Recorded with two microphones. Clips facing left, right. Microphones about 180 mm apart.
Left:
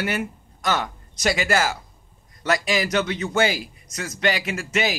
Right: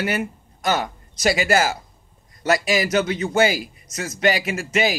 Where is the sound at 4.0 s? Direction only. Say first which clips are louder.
Right 3 dB; 40° right (ahead or behind).